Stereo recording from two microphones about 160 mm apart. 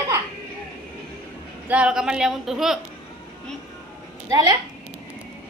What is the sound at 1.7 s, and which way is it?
Speech, 5° right (ahead or behind).